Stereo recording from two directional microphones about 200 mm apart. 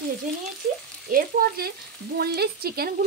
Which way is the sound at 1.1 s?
50° right (ahead or behind).